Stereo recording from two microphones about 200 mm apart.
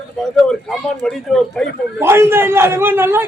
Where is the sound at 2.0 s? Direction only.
10° right (ahead or behind).